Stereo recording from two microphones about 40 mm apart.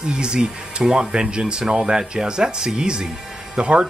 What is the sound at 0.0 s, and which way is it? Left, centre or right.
Speech, right.